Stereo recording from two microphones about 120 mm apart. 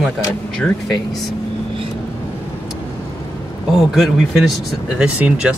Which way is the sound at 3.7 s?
5° right (ahead or behind).